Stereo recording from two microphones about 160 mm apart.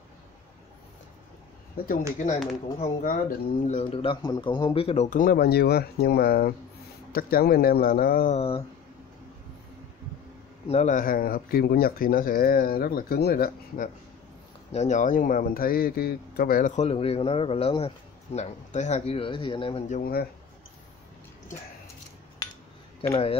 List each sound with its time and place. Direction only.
1.9 s speech: 50° left (ahead or behind)
8.4 s a man's voice: 35° left (ahead or behind)
10.7 s speech: 50° left (ahead or behind); by 13.8 s 70° left (ahead or behind)
14.7 s speech: 45° left (ahead or behind); by 16.7 s 65° left (ahead or behind)
16.7 s a man's voice: 40° left (ahead or behind)
19.9 s speech: 65° left (ahead or behind)
22.4 s cutlery: 20° left (ahead or behind)
23.0 s a man's voice: 35° left (ahead or behind)